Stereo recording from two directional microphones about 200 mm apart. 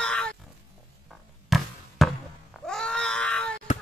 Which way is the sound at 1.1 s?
Centre (ahead or behind).